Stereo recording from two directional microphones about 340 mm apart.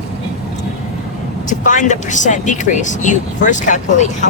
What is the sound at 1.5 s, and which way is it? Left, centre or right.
Speech, left.